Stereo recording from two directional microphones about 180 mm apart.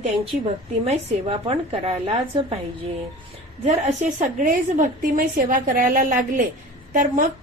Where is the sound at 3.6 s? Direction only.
40° right (ahead or behind).